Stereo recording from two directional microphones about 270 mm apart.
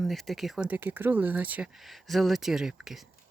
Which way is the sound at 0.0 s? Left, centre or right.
Centre.